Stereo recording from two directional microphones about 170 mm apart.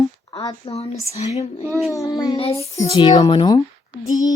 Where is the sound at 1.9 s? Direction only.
20° left (ahead or behind).